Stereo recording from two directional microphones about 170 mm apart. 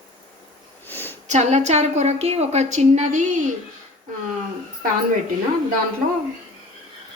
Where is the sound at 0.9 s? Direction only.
10° left (ahead or behind).